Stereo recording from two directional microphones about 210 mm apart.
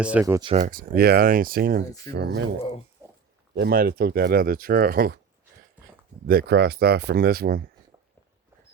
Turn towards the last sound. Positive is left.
turn(degrees=-45)  # may be behind; listen again after turning